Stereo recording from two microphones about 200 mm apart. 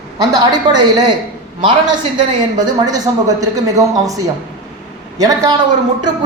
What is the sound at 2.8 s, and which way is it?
Speech, 20° right (ahead or behind).